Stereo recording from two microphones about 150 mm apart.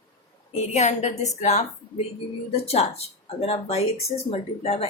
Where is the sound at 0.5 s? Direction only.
50° left (ahead or behind).